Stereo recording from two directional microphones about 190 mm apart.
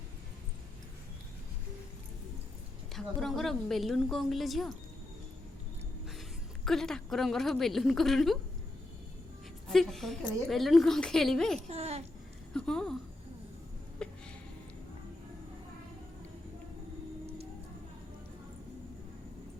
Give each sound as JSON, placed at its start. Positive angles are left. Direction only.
{"t": 2.9, "sound": "a woman's voice", "side_deg": 0}
{"t": 6.7, "sound": "a woman's voice", "side_deg": 0}
{"t": 9.6, "sound": "a woman's voice", "side_deg": 0}
{"t": 11.7, "sound": "a sound", "side_deg": -35}
{"t": 12.5, "sound": "speech", "side_deg": 5}
{"t": 14.0, "sound": "a sound", "side_deg": 5}